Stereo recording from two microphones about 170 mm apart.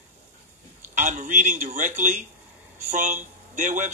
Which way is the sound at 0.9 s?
45° right (ahead or behind).